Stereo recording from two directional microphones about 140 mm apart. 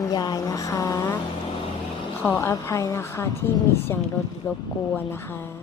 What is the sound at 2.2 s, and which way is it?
A woman's voice, 20° left (ahead or behind).